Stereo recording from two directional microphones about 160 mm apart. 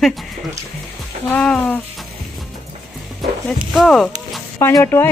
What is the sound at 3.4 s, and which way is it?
Speech, centre (ahead or behind).